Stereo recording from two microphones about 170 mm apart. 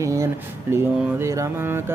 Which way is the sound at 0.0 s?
15° right (ahead or behind).